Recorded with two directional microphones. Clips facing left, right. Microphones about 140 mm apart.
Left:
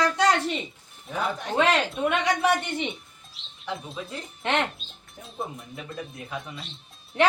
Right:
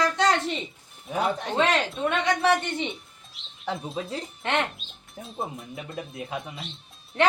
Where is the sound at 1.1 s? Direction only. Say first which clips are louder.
Right 1 dB; 25° right (ahead or behind).